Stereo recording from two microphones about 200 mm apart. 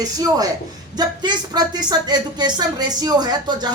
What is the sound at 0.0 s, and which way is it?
A woman's voice, 20° right (ahead or behind).